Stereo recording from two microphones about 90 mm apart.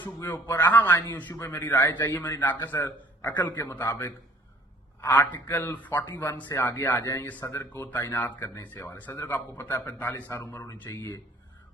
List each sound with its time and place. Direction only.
0.3 s a man's voice: 25° left (ahead or behind)
4.9 s a man's voice: 20° left (ahead or behind)
7.0 s a man's voice: 40° left (ahead or behind); by 10.4 s 20° left (ahead or behind)
10.7 s speech: 30° left (ahead or behind)